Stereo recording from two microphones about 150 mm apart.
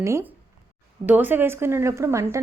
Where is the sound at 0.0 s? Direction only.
20° right (ahead or behind).